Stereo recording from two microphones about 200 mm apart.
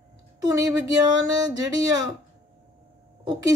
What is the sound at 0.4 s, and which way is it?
Speech, 15° right (ahead or behind).